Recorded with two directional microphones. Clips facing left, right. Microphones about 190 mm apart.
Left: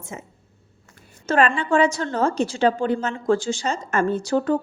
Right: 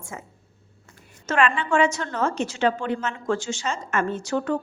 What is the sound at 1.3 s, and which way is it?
A woman's voice, 40° left (ahead or behind).